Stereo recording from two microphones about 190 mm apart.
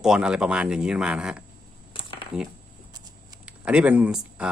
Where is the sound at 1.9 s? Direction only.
25° left (ahead or behind).